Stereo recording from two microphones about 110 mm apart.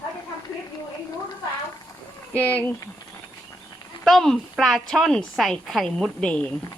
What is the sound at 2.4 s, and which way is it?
Speech, 15° left (ahead or behind).